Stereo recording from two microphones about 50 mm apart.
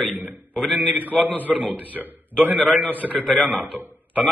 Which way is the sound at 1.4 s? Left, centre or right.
Right.